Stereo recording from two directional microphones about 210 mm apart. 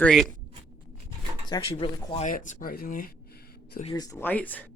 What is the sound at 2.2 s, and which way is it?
Speech, 35° left (ahead or behind).